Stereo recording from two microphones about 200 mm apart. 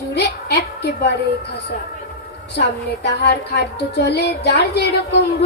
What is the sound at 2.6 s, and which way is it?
Child singing, 55° left (ahead or behind).